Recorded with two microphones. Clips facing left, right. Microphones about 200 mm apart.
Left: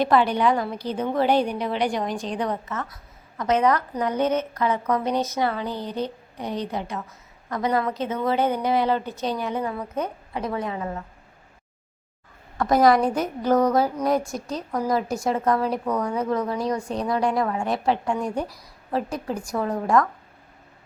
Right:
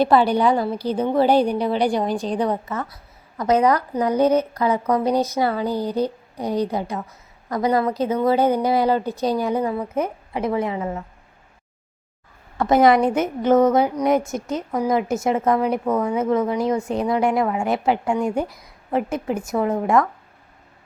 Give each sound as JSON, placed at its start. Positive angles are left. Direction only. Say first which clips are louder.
{"t": 0.0, "sound": "a woman's voice", "louder": "right 3 dB", "side_deg": -35}
{"t": 12.5, "sound": "a woman's voice", "louder": "right 3 dB", "side_deg": -25}